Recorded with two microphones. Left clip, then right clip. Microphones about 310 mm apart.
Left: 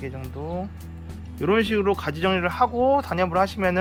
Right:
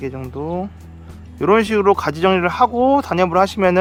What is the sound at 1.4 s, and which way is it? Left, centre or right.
Speech, centre.